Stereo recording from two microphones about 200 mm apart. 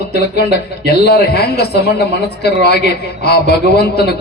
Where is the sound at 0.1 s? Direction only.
55° left (ahead or behind).